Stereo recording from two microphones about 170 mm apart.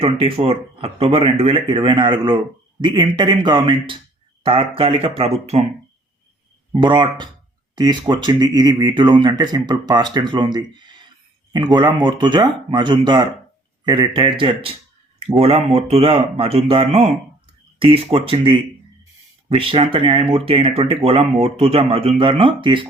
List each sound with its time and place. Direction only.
0.0 s speech: 35° right (ahead or behind)
6.7 s speech: 25° right (ahead or behind)